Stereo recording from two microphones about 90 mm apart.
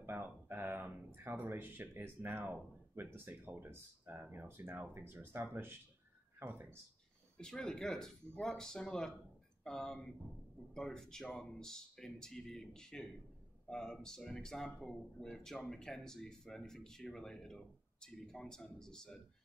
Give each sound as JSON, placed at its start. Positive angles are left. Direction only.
{"t": 0.0, "sound": "speech", "side_deg": -25}
{"t": 7.3, "sound": "speech", "side_deg": 10}